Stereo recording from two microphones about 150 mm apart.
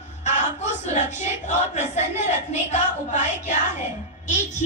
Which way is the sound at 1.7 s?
50° left (ahead or behind).